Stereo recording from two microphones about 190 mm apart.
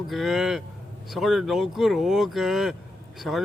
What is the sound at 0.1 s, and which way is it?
Speech, centre (ahead or behind).